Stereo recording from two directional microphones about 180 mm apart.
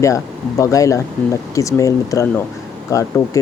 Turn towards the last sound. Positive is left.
turn(degrees=15)  # may be behind; listen again after turning